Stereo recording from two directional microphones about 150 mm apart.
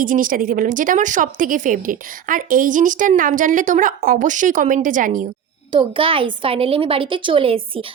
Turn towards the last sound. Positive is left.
turn(degrees=-40)  # may be behind; listen again after turning